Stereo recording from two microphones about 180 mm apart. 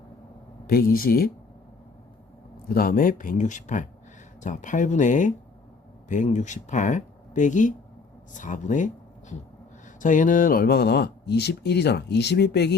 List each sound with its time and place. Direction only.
0.7 s speech: 55° left (ahead or behind)
2.6 s speech: 55° left (ahead or behind)
10.0 s speech: 45° left (ahead or behind); by 12.7 s 65° left (ahead or behind)